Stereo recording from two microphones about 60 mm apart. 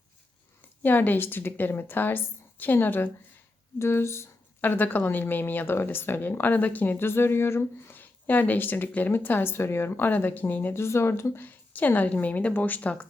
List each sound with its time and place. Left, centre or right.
0.8 s speech: left
3.8 s speech: left
4.6 s speech: left
7.9 s speech: left
10.8 s speech: left
11.4 s speech: left